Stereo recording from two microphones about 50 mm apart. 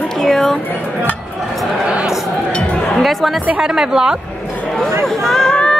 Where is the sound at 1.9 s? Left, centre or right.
Centre.